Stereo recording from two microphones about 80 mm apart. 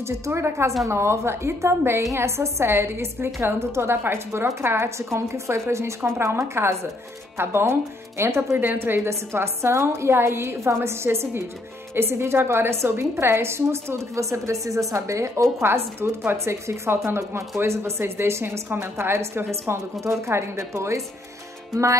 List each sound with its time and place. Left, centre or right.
0.0 s a woman's voice: right